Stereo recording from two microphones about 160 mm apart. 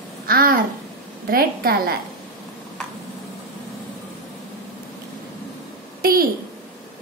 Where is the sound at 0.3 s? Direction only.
65° right (ahead or behind).